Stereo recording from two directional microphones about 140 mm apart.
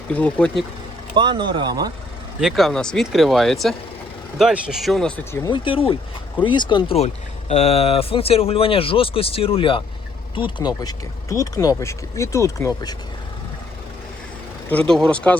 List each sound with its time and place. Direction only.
0.1 s speech: 10° left (ahead or behind)
1.1 s speech: 35° right (ahead or behind)
2.4 s speech: centre (ahead or behind)
5.5 s speech: 35° left (ahead or behind)
14.7 s speech: 5° left (ahead or behind)